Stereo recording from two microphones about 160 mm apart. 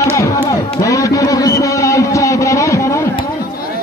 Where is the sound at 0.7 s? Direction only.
20° left (ahead or behind).